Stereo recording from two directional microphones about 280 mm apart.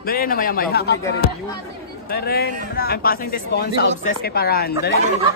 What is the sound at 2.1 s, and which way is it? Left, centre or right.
Speech, left.